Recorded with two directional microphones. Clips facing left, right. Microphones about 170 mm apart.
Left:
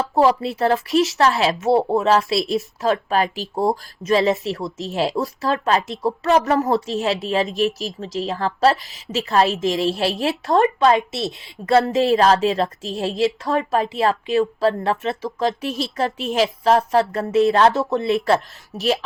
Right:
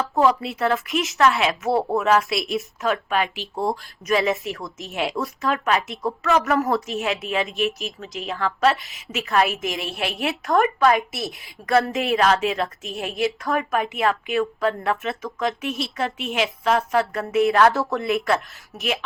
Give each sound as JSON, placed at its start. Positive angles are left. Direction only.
{"t": 0.2, "sound": "a woman's voice", "side_deg": 35}